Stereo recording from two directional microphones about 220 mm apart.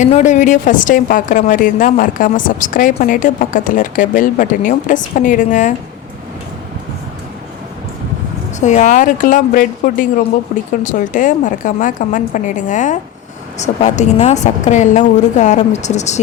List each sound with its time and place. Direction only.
0.0 s a woman's voice: 35° left (ahead or behind)
8.6 s a woman's voice: 35° left (ahead or behind)